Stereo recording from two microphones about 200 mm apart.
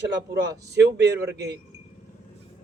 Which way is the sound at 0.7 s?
55° right (ahead or behind).